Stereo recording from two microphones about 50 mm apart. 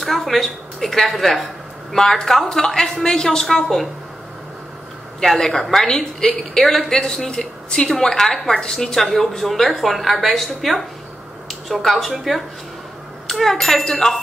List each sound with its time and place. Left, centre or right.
0.0 s speech: centre
5.2 s a woman's voice: centre